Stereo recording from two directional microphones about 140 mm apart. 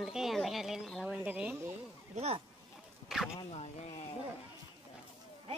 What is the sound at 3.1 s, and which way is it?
Speech, 5° right (ahead or behind).